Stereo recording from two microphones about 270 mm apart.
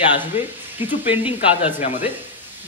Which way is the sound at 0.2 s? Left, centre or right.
Centre.